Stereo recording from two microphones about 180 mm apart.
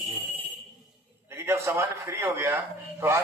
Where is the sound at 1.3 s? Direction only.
15° right (ahead or behind).